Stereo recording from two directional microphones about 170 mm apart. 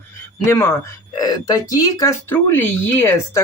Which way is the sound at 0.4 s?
15° left (ahead or behind).